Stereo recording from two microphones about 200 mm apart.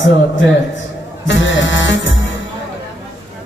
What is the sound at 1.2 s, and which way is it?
Music, 65° left (ahead or behind).